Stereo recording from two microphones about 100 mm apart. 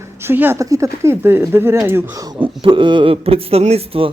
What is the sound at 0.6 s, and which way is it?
Speech, 30° right (ahead or behind).